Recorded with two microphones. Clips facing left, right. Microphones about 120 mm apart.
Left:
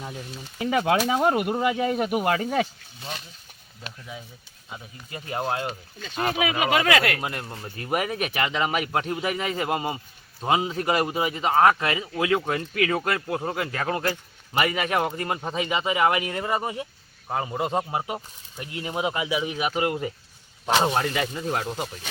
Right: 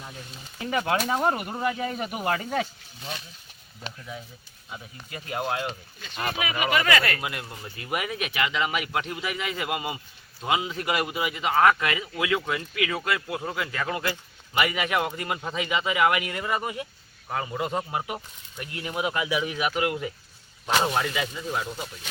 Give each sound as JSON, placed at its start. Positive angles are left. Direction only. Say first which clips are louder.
{"t": 0.7, "sound": "speech", "louder": "left 3 dB", "side_deg": 90}
{"t": 3.8, "sound": "speech", "louder": "right 1 dB", "side_deg": 10}
{"t": 4.7, "sound": "a man's voice", "louder": "left 1 dB", "side_deg": 30}
{"t": 6.6, "sound": "speech", "louder": "left 1 dB", "side_deg": 90}
{"t": 7.2, "sound": "a man's voice", "louder": "left 2 dB", "side_deg": 35}
{"t": 21.0, "sound": "speech", "louder": "left 3 dB", "side_deg": 50}